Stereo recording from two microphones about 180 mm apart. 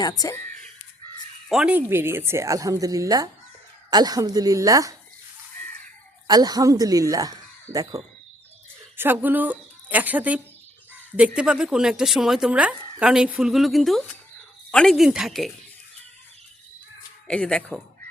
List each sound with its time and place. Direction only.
0.0 s speech: 20° left (ahead or behind)
1.5 s a woman's voice: 5° right (ahead or behind)
6.2 s a woman's voice: 20° right (ahead or behind); by 15.5 s centre (ahead or behind)
17.2 s a woman's voice: 5° left (ahead or behind)